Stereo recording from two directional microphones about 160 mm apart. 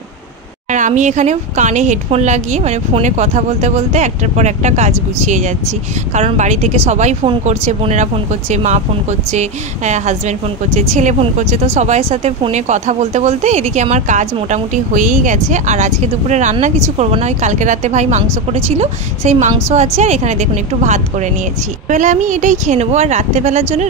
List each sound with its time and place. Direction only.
0.7 s a woman's voice: 50° right (ahead or behind)